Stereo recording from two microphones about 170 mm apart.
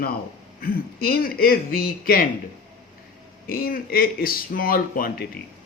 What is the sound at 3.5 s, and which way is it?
Speech, 55° left (ahead or behind).